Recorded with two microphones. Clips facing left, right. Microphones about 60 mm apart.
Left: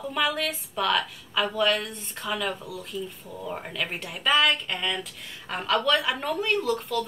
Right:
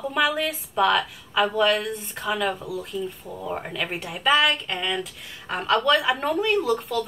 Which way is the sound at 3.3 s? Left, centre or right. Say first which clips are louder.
Right 2 dB; centre.